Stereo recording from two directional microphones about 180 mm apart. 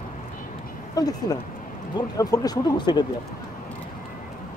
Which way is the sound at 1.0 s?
20° left (ahead or behind).